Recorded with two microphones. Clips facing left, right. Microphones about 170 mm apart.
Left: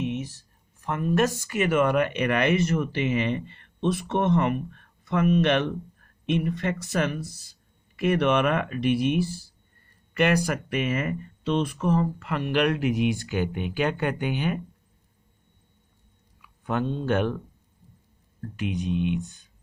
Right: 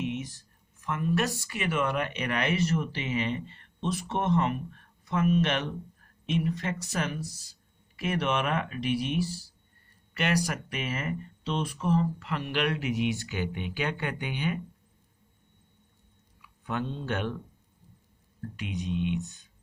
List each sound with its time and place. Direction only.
0.8 s speech: 40° left (ahead or behind)
16.4 s speech: 50° left (ahead or behind)
18.5 s speech: 50° left (ahead or behind)